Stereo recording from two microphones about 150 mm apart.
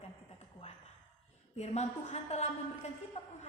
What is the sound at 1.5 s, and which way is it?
Speech, 45° left (ahead or behind).